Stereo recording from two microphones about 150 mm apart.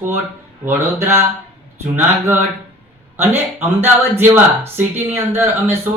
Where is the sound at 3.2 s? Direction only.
15° right (ahead or behind).